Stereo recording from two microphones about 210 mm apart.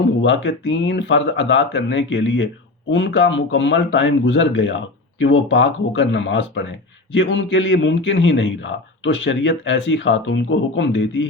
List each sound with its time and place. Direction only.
0.2 s speech: 60° left (ahead or behind)